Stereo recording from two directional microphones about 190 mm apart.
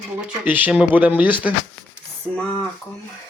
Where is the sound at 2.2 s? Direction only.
5° left (ahead or behind).